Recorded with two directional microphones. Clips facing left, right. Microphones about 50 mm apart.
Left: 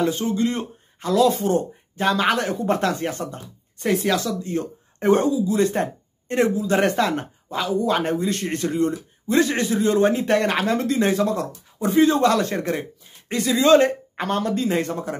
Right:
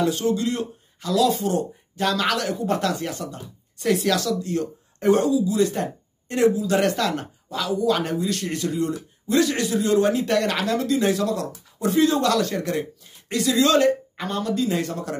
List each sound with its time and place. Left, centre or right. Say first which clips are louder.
0.0 s a man's voice: even; left